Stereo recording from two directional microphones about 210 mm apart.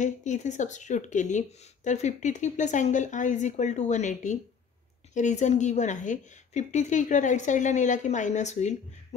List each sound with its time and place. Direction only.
0.0 s a woman's voice: 35° left (ahead or behind)